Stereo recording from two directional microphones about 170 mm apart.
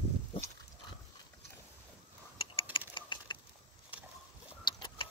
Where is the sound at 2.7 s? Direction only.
30° left (ahead or behind).